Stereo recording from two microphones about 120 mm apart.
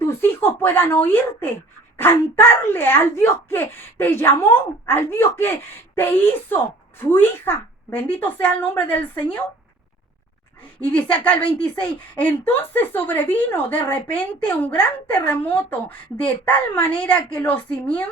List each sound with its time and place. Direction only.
0.0 s a woman's voice: 20° left (ahead or behind)
10.8 s a woman's voice: 15° left (ahead or behind)